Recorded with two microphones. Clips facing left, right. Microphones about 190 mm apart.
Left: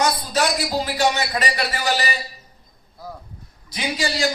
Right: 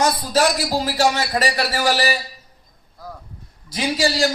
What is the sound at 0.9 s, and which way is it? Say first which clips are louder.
Speech: right 3 dB; 40° right (ahead or behind).